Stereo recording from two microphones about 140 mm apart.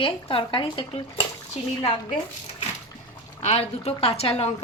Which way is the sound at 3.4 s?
50° left (ahead or behind).